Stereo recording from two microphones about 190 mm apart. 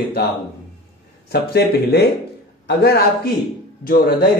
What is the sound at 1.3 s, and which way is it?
A man's voice, 55° left (ahead or behind).